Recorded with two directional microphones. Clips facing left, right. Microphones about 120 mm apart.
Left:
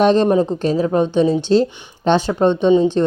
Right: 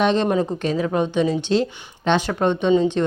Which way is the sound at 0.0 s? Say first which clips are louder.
Left 5 dB; 40° left (ahead or behind).